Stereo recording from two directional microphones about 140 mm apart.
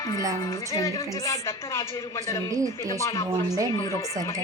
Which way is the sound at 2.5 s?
25° right (ahead or behind).